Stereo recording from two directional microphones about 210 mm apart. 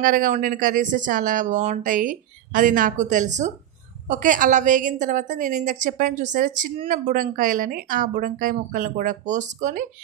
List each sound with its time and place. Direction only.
0.0 s a woman's voice: 40° right (ahead or behind)